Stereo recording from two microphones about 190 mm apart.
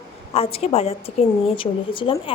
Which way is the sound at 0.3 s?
30° left (ahead or behind).